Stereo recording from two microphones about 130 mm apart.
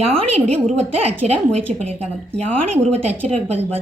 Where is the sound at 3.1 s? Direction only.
55° right (ahead or behind).